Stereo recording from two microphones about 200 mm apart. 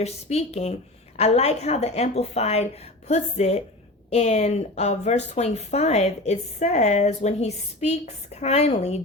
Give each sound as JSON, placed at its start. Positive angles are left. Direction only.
{"t": 0.0, "sound": "a woman's voice", "side_deg": 30}